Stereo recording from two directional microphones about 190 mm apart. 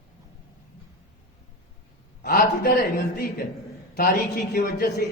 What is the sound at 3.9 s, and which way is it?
Speech, 45° left (ahead or behind).